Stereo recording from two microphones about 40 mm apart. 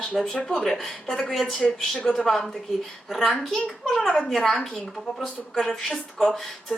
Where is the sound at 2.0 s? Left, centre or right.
Left.